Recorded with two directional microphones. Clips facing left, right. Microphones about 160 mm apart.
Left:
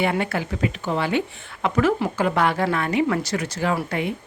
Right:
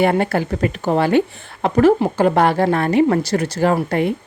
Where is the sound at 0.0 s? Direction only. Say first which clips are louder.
Right 6 dB; 40° right (ahead or behind).